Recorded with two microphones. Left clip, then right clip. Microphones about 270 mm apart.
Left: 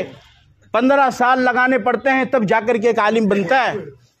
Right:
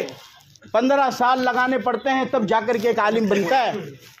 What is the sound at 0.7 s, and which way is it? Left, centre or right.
A man's voice, left.